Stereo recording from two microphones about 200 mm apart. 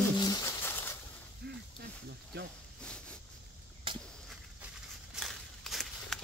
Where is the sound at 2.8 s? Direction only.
5° left (ahead or behind).